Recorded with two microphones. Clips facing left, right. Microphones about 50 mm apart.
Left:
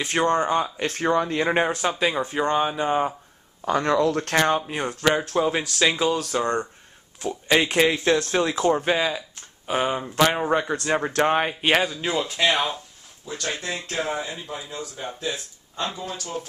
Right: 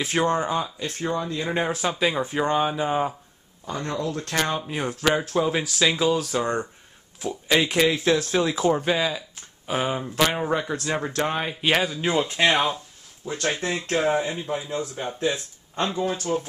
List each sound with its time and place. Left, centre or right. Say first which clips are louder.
0.0 s speech: left 1 dB; centre
0.7 s speech: left 5 dB; left
1.7 s speech: left 1 dB; centre
3.6 s speech: left 8 dB; left
4.4 s speech: left 4 dB; centre
4.7 s speech: left 1 dB; centre
7.9 s speech: even; centre
8.8 s speech: left 1 dB; centre
11.2 s speech: left 5 dB; left
11.6 s speech: right 3 dB; centre
12.0 s speech: right 2 dB; centre
13.2 s speech: right 4 dB; right
13.9 s speech: right 6 dB; centre
16.0 s speech: right 8 dB; right